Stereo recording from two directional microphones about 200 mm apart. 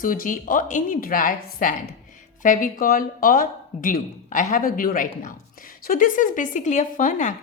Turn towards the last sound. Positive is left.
turn(degrees=40)  # may be behind; listen again after turning